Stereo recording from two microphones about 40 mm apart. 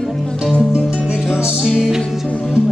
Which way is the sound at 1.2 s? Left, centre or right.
Centre.